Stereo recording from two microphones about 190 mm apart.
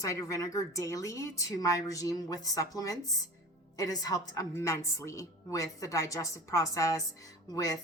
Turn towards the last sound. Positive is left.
turn(degrees=20)  # may be behind; listen again after turning